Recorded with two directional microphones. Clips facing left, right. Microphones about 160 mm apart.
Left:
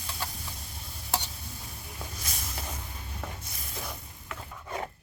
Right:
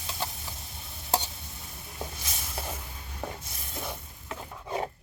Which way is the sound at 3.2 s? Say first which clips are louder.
Right 6 dB; 30° right (ahead or behind).